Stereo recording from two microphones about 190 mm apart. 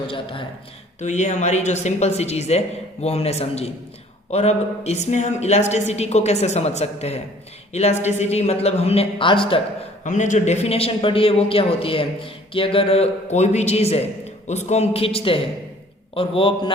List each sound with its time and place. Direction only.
0.1 s a man's voice: 25° left (ahead or behind)
10.0 s a man's voice: 40° left (ahead or behind)